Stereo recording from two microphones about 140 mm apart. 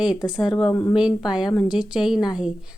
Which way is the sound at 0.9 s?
5° right (ahead or behind).